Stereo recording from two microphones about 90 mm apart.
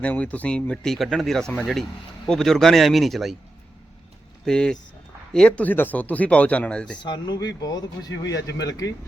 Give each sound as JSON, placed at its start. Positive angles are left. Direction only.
{"t": 0.0, "sound": "speech", "side_deg": 15}
{"t": 4.4, "sound": "speech", "side_deg": 10}
{"t": 7.0, "sound": "speech", "side_deg": 55}